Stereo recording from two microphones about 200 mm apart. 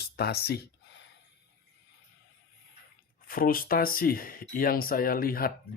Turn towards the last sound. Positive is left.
turn(degrees=45)  # may be behind; listen again after turning